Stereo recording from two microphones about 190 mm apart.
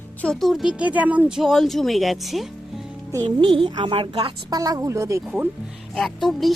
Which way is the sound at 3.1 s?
25° right (ahead or behind).